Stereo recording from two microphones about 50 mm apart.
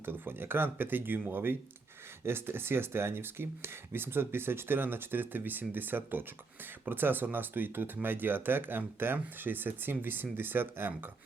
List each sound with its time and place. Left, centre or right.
0.0 s speech: right